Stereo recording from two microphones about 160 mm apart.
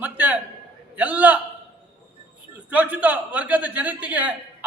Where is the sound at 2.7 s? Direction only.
10° right (ahead or behind).